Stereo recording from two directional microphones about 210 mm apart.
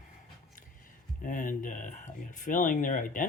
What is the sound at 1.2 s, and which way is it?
Speech, 40° left (ahead or behind).